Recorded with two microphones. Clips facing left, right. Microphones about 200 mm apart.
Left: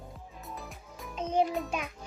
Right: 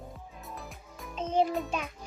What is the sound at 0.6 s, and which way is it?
Music, centre (ahead or behind).